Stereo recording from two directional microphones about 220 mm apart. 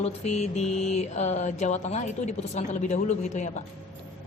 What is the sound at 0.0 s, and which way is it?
Mantra, 30° left (ahead or behind).